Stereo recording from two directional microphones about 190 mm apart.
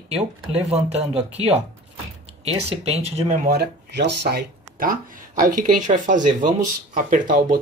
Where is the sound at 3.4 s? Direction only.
55° right (ahead or behind).